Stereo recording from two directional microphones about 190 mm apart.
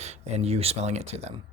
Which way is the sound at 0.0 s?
35° right (ahead or behind).